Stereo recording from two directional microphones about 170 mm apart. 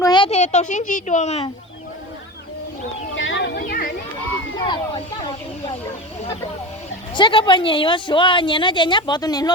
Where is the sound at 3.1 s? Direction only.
90° left; by 3.9 s 60° left (ahead or behind).